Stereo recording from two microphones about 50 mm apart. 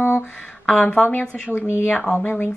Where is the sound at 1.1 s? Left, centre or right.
Left.